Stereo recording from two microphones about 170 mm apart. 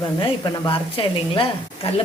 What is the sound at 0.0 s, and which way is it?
A woman's voice, 30° left (ahead or behind).